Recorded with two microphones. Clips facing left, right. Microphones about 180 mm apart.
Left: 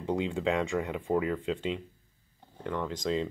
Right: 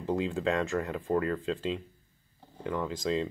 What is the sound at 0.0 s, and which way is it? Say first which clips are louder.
Speech: even; centre (ahead or behind).